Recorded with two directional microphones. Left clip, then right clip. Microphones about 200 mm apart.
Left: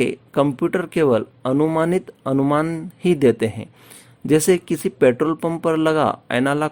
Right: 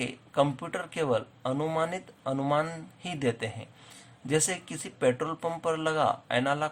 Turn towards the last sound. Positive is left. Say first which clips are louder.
# left 8 dB
turn(degrees=45)  # may be behind; listen again after turning